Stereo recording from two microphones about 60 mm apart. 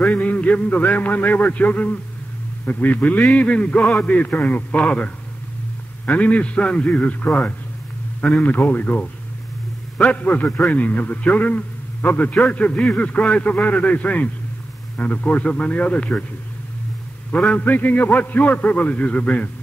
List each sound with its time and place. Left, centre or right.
0.1 s a man's voice: left
7.2 s a man's voice: centre
10.1 s a man's voice: left
17.3 s a man's voice: left